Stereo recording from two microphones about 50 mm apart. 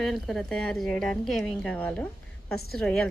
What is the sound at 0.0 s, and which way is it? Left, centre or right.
A woman's voice, centre.